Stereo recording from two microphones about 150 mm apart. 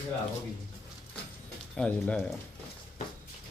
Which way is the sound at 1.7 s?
5° left (ahead or behind).